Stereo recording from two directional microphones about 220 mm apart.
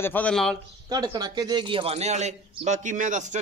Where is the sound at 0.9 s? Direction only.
20° right (ahead or behind).